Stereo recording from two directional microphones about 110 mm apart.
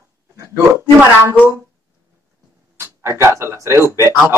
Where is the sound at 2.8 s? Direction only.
25° right (ahead or behind).